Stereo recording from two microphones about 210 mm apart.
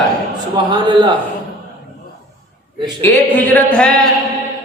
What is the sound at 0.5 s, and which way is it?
Speech, 20° right (ahead or behind).